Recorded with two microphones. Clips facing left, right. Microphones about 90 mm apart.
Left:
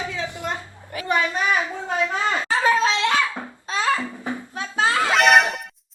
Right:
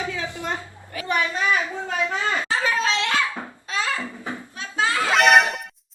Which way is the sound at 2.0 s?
20° left (ahead or behind).